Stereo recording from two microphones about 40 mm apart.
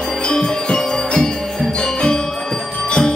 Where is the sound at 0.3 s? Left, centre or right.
Centre.